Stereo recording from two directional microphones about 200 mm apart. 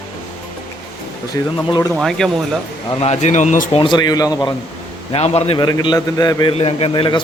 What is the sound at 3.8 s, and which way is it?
Speech, 20° left (ahead or behind).